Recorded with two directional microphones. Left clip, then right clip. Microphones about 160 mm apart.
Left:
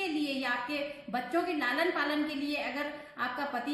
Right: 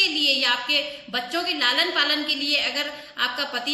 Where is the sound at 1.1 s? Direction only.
20° right (ahead or behind).